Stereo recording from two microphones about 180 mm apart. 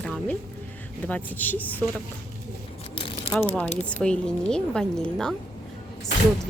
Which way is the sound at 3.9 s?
5° left (ahead or behind).